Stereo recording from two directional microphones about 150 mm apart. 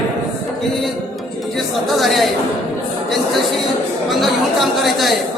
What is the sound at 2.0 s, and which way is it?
Speech, centre (ahead or behind).